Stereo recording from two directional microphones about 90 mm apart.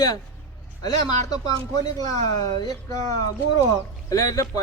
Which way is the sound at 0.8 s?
45° left (ahead or behind).